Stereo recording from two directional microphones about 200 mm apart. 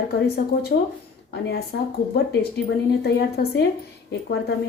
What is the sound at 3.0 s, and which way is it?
Speech, 55° left (ahead or behind).